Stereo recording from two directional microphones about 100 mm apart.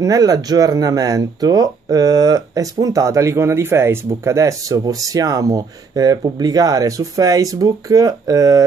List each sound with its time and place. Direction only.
0.0 s speech: 35° right (ahead or behind)